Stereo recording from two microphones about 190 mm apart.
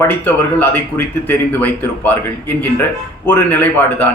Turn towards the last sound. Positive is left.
turn(degrees=10)  # may be behind; listen again after turning